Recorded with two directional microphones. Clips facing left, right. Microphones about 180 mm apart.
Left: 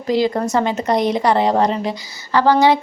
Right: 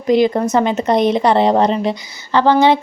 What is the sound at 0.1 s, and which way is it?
A woman's voice, 20° right (ahead or behind).